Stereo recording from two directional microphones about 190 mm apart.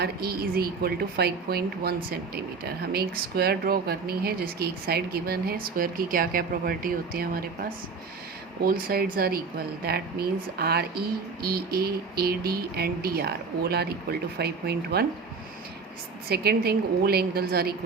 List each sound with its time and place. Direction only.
0.0 s a woman's voice: 55° right (ahead or behind)
16.3 s speech: 55° right (ahead or behind)